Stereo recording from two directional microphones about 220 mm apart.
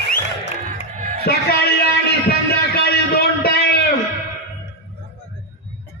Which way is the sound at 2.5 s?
45° left (ahead or behind).